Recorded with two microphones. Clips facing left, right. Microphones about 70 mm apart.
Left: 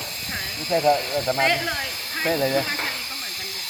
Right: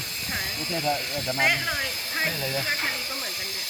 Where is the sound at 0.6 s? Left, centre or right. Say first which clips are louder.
Left 9 dB; left.